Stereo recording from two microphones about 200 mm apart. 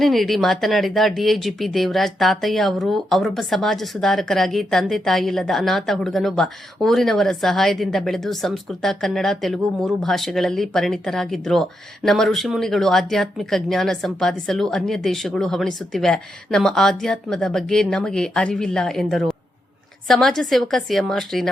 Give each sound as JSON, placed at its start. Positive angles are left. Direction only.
{"t": 0.0, "sound": "speech", "side_deg": 0}